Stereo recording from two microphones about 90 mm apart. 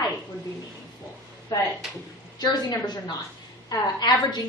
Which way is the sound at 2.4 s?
50° left (ahead or behind).